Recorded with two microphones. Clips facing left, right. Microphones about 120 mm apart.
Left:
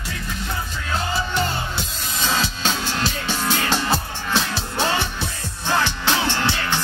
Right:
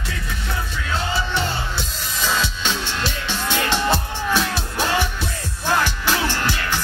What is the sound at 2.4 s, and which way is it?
Music, 40° left (ahead or behind).